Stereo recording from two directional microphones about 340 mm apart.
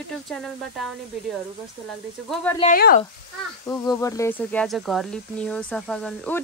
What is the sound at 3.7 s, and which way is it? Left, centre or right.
Speech, centre.